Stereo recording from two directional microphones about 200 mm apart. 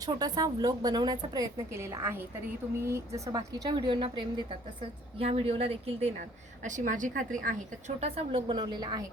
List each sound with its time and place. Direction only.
0.0 s a woman's voice: 20° right (ahead or behind)